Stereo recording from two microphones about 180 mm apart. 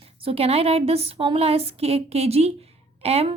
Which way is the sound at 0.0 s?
30° right (ahead or behind).